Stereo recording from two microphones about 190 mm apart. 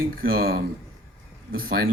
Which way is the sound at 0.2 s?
50° right (ahead or behind).